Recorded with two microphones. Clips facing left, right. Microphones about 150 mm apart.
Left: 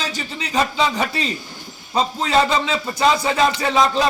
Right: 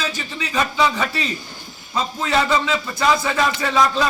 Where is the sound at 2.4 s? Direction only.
25° left (ahead or behind).